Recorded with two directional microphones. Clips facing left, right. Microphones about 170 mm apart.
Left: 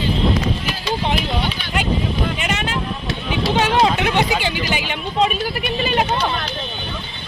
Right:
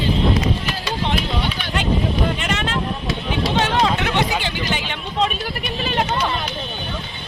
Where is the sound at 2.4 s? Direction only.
5° left (ahead or behind).